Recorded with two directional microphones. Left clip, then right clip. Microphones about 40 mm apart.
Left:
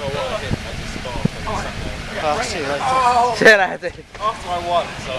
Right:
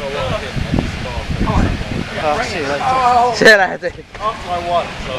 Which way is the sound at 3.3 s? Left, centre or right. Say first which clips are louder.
Right 2 dB; centre.